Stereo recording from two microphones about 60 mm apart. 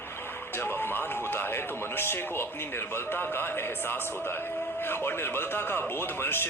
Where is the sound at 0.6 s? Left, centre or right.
Left.